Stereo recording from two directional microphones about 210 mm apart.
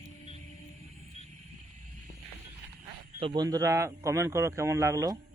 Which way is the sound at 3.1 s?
20° right (ahead or behind).